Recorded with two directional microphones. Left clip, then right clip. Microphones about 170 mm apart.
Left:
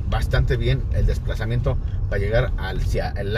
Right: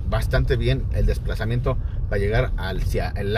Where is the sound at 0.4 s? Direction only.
40° right (ahead or behind).